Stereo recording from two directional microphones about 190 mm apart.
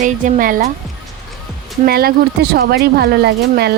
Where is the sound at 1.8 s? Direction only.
55° right (ahead or behind).